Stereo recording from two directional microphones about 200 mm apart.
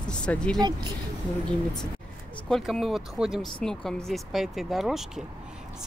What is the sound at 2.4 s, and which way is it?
Speech, 5° left (ahead or behind).